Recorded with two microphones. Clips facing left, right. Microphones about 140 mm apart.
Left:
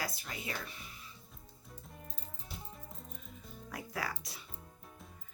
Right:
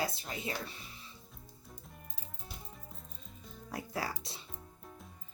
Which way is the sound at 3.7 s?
30° right (ahead or behind).